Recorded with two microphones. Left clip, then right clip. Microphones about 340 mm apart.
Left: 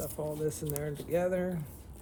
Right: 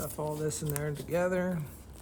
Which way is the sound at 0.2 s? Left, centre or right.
Right.